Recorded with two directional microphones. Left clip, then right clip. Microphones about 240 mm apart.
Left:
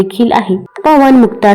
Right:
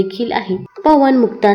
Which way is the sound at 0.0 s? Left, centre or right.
Centre.